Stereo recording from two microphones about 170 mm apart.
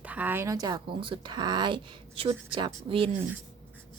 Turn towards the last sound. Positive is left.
turn(degrees=-30)  # may be behind; listen again after turning